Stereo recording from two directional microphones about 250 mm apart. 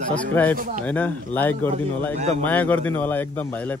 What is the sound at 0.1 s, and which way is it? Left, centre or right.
Speech, centre.